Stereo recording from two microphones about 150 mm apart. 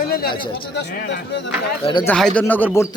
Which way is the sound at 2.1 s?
5° left (ahead or behind).